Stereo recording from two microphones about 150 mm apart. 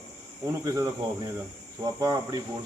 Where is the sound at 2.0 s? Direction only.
20° right (ahead or behind).